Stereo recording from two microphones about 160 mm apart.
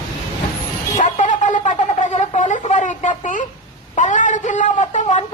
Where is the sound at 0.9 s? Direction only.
50° left (ahead or behind).